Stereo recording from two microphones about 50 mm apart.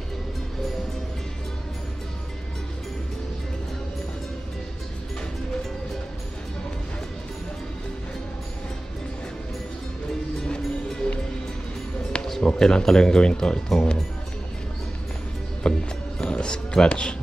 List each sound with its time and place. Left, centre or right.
10.4 s music: centre
12.3 s speech: centre
15.6 s music: centre